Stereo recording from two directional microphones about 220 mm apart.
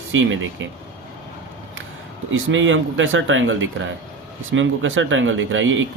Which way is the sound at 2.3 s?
60° right (ahead or behind).